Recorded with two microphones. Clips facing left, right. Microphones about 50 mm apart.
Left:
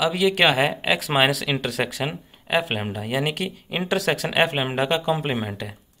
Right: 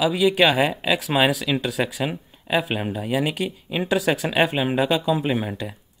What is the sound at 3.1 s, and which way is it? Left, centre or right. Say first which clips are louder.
Speech: right 1 dB; left.